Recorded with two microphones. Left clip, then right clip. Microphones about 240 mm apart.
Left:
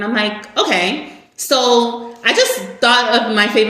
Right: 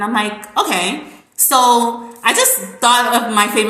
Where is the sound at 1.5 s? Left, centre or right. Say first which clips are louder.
Right 1 dB; centre.